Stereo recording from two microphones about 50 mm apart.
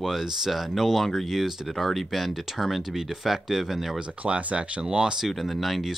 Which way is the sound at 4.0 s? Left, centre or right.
Right.